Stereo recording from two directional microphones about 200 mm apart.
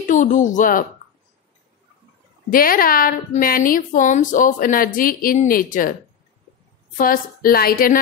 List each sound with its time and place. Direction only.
0.0 s speech: 40° left (ahead or behind)
2.5 s a woman's voice: 45° left (ahead or behind)
7.0 s a woman's voice: 45° left (ahead or behind)